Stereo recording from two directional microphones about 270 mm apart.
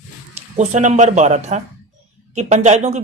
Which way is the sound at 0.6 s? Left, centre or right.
Right.